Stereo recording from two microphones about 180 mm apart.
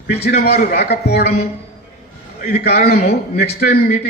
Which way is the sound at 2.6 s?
65° left (ahead or behind).